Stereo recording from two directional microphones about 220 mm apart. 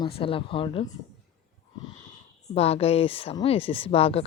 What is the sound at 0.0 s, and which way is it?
Speech, 25° left (ahead or behind).